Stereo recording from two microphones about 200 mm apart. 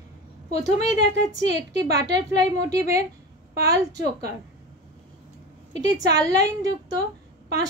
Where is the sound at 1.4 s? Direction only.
60° right (ahead or behind).